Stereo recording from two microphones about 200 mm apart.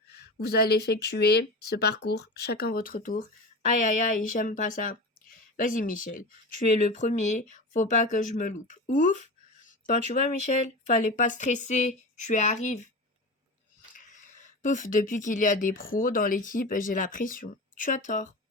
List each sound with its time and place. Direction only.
0.1 s speech: 55° left (ahead or behind); by 12.9 s 35° left (ahead or behind)
13.9 s speech: 40° left (ahead or behind)